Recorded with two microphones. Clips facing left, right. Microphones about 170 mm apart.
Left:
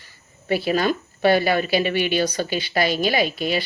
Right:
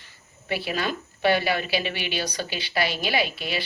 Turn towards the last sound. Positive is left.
turn(degrees=45)  # may be behind; listen again after turning